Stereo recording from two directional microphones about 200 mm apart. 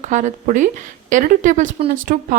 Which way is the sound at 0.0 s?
35° right (ahead or behind).